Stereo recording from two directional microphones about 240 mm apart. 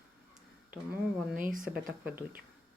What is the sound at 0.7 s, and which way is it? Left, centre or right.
Speech, centre.